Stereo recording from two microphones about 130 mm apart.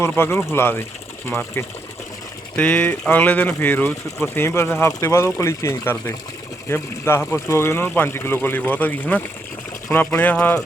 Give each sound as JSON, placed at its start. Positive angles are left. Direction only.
{"t": 0.0, "sound": "speech", "side_deg": 20}